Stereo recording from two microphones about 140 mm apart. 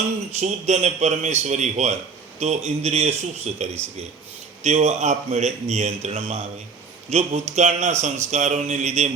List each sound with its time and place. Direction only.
0.3 s speech: 55° right (ahead or behind)